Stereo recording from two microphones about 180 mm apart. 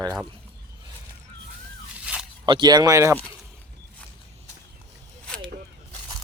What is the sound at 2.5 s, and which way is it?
Speech, 25° right (ahead or behind).